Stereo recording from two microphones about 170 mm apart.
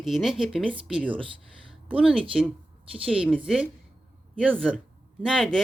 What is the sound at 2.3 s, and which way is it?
Speech, centre (ahead or behind).